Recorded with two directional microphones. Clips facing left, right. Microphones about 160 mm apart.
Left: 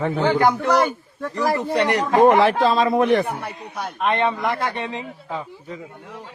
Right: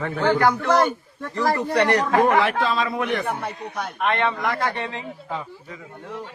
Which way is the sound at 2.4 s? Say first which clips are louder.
Left 4 dB; 30° left (ahead or behind).